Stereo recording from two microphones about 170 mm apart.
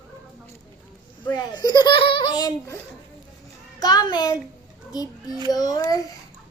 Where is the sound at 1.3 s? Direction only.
25° left (ahead or behind).